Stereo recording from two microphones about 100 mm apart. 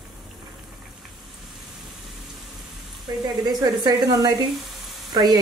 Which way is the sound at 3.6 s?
45° right (ahead or behind).